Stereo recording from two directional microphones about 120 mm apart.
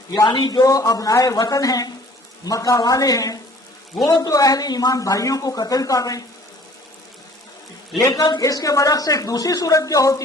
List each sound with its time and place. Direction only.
0.2 s speech: 40° left (ahead or behind)
8.0 s speech: 35° left (ahead or behind)